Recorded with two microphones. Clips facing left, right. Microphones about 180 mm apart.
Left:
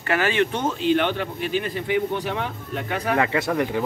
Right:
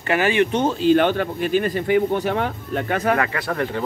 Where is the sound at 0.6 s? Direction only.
40° right (ahead or behind).